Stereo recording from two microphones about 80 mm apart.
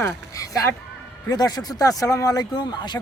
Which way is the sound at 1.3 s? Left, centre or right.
Left.